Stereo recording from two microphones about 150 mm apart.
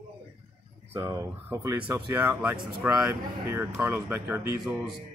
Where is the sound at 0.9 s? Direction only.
20° right (ahead or behind).